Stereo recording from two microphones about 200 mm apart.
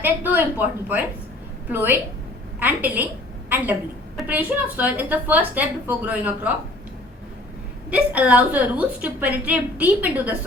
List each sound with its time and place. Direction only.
0.0 s a woman's voice: 10° right (ahead or behind)
7.9 s a woman's voice: 5° right (ahead or behind)